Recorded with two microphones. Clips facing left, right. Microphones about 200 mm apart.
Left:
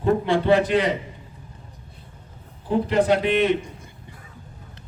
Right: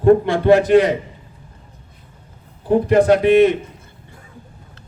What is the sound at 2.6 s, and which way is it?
Speech, 50° right (ahead or behind).